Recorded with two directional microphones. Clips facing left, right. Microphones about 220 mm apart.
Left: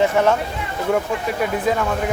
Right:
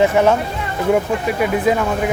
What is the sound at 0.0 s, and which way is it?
Speech, 5° right (ahead or behind).